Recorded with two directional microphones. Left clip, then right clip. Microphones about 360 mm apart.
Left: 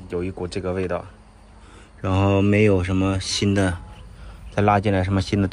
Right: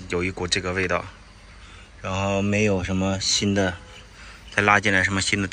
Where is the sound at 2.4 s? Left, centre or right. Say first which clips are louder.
Left 4 dB; left.